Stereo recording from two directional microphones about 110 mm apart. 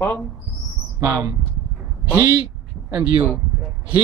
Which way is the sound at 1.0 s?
30° right (ahead or behind).